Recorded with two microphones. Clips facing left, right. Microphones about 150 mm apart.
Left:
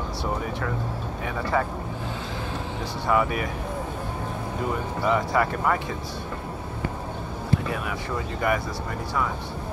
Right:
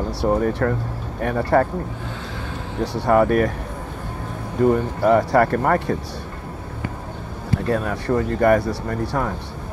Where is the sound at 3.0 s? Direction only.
55° right (ahead or behind).